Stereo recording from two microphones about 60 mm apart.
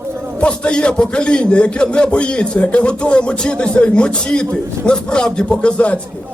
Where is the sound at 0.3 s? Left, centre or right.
Centre.